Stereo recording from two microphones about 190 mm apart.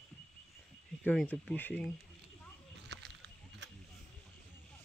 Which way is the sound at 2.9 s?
65° right (ahead or behind).